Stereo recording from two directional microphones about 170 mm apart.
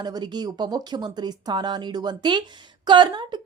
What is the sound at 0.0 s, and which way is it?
A woman's voice, 25° right (ahead or behind).